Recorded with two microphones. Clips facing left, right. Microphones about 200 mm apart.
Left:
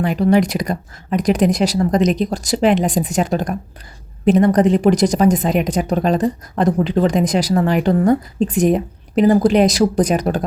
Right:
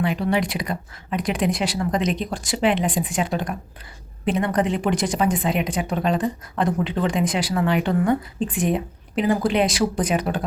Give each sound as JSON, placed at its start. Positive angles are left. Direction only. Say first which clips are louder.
{"t": 0.0, "sound": "a woman's voice", "louder": "left 7 dB", "side_deg": 40}